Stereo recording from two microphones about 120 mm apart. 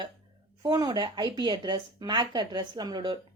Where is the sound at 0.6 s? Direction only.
35° right (ahead or behind).